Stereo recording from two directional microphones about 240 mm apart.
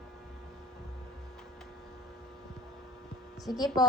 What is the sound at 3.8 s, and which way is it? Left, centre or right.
Speech, centre.